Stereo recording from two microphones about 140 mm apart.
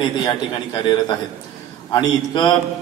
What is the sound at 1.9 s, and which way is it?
Speech, 35° left (ahead or behind).